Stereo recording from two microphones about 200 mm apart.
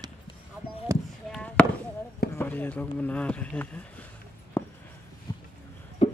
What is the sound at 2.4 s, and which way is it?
Speech, 10° left (ahead or behind).